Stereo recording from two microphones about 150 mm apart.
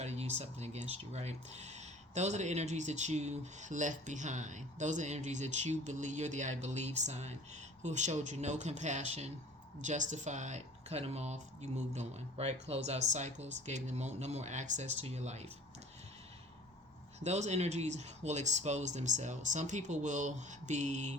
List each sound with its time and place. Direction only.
0.0 s speech: 45° right (ahead or behind)
17.2 s speech: 50° right (ahead or behind)